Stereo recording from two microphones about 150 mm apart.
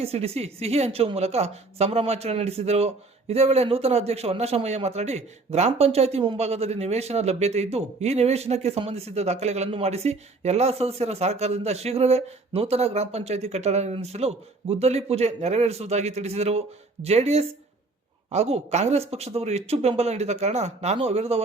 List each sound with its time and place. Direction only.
0.0 s a man's voice: 40° right (ahead or behind)